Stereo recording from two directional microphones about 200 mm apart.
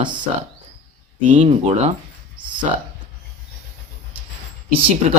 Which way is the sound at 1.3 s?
30° right (ahead or behind).